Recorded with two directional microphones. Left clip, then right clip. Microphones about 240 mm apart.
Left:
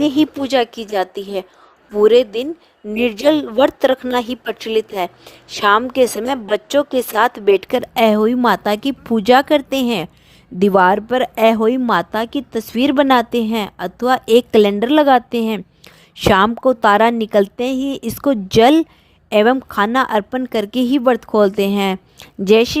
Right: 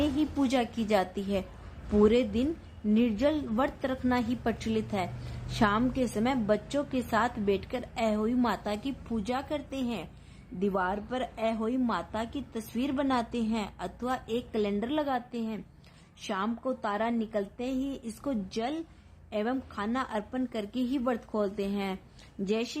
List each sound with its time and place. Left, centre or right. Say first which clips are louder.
0.0 s a woman's voice: left 13 dB; left